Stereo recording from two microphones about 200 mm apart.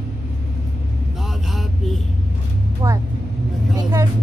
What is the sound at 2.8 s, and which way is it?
Vehicle, 20° right (ahead or behind).